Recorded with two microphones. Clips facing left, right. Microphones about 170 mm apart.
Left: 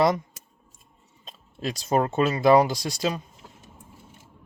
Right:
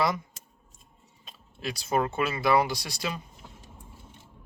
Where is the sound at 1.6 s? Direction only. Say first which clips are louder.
Left 4 dB; 45° left (ahead or behind).